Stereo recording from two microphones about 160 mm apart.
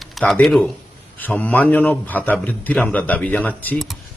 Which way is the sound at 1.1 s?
10° left (ahead or behind).